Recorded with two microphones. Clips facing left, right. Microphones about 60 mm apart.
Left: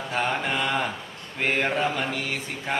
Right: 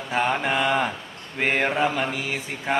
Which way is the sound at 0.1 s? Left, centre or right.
Centre.